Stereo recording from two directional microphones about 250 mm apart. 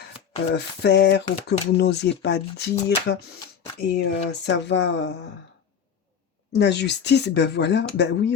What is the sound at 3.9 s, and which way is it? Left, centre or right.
Speech, left.